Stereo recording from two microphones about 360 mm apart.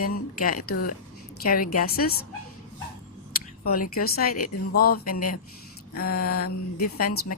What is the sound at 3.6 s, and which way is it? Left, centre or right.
A woman's voice, left.